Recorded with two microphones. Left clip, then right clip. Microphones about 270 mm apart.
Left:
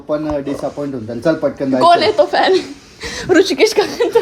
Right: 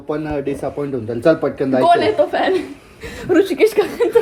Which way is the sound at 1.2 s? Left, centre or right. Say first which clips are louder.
Right 1 dB; centre.